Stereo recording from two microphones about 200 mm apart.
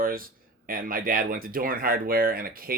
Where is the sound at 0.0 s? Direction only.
45° right (ahead or behind).